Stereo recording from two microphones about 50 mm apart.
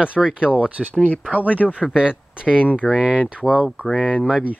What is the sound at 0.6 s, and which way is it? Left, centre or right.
Speech, right.